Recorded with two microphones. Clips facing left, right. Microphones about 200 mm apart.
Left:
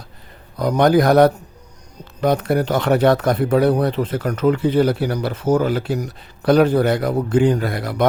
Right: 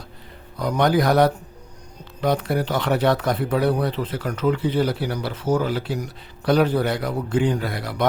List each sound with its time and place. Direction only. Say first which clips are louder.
0.6 s speech: left 5 dB; 45° left (ahead or behind)